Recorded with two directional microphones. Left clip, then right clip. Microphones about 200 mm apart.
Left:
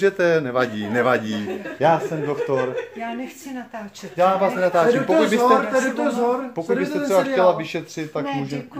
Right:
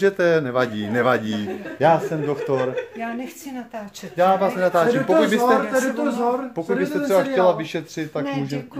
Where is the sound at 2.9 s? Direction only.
50° right (ahead or behind).